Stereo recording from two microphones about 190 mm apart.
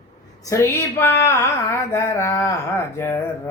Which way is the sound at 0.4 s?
15° left (ahead or behind).